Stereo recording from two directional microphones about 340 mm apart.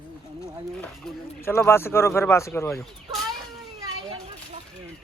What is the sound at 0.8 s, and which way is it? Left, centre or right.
Speech, centre.